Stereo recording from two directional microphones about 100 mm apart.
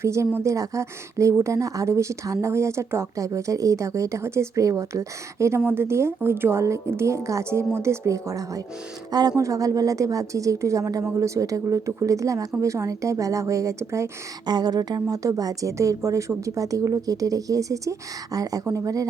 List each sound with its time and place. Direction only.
0.0 s speech: 30° right (ahead or behind)
14.4 s speech: 45° right (ahead or behind)